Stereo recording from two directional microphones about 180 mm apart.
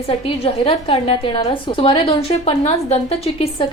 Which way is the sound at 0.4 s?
30° left (ahead or behind).